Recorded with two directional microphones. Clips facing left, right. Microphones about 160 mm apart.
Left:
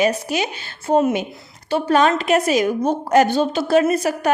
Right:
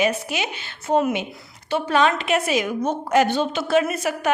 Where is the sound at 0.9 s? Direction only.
25° left (ahead or behind).